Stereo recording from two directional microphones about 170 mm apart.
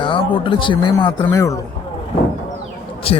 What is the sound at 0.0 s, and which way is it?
Speech, 30° left (ahead or behind).